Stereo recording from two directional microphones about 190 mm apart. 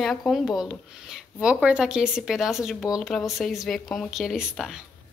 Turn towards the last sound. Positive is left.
turn(degrees=0)  # may be behind; listen again after turning